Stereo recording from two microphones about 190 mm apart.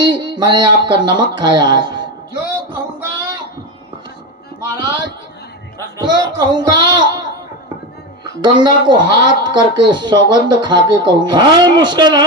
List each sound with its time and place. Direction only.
0.0 s speech: 25° right (ahead or behind)
6.0 s music: 25° right (ahead or behind)
8.4 s a woman's voice: 25° right (ahead or behind)